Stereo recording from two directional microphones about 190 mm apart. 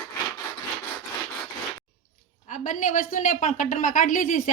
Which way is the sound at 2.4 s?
40° left (ahead or behind).